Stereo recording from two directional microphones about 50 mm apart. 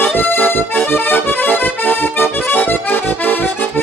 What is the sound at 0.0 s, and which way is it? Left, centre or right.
Accordion, left.